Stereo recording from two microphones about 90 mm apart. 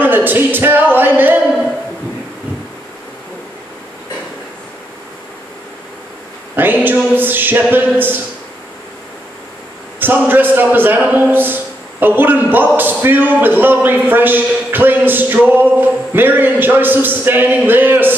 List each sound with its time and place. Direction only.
0.0 s a sound: 20° right (ahead or behind)
6.5 s a man's voice: 20° right (ahead or behind)
9.9 s a man's voice: 20° right (ahead or behind)